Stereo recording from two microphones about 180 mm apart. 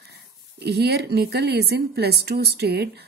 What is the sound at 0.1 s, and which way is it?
Speech, 70° right (ahead or behind).